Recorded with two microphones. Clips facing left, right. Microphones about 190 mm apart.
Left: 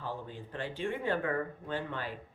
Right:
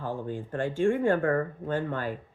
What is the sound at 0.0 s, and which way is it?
Speech, 50° right (ahead or behind).